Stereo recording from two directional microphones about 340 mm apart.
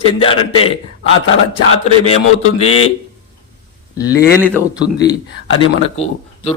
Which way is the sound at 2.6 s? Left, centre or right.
Left.